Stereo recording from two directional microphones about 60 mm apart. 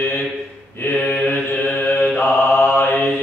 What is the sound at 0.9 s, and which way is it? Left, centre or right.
Mantra, left.